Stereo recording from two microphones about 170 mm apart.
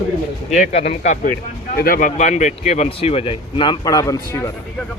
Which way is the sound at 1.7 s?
60° left (ahead or behind).